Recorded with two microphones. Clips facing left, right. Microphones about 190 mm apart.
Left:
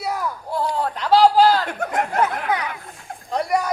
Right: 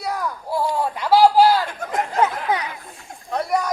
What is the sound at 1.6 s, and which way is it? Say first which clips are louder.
Chatter: left 2 dB; 65° left (ahead or behind).